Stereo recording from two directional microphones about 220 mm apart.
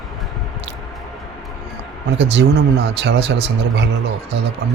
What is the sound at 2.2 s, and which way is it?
Speech, 50° right (ahead or behind).